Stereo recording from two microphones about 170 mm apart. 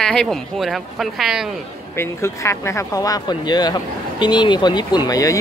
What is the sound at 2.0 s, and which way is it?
Speech, 15° left (ahead or behind).